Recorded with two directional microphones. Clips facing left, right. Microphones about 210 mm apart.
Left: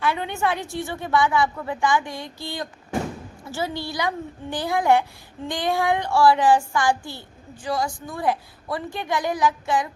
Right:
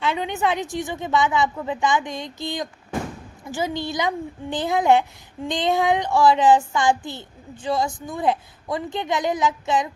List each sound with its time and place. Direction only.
0.0 s a woman's voice: 20° right (ahead or behind)